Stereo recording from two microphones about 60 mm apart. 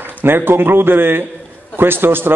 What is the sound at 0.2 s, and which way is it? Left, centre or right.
A man's voice, right.